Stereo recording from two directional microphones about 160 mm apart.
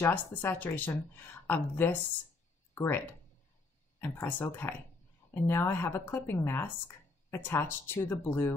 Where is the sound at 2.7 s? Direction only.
15° left (ahead or behind).